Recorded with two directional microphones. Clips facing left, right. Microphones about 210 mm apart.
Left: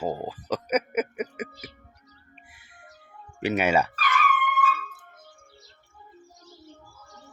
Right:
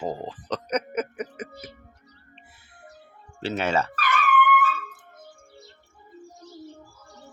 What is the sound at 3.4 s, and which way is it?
Speech, 15° left (ahead or behind).